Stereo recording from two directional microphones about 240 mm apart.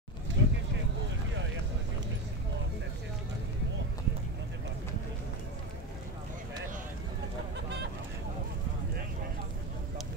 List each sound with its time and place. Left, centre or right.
0.4 s vehicle: right